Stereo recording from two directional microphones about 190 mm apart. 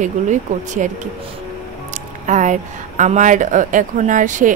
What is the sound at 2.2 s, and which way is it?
Speech, 40° right (ahead or behind).